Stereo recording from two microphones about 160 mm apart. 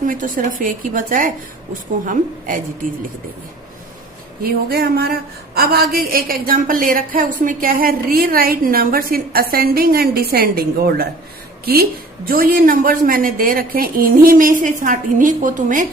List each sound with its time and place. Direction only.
0.0 s speech: 55° right (ahead or behind)
4.4 s a woman's voice: 80° right; by 15.9 s 55° right (ahead or behind)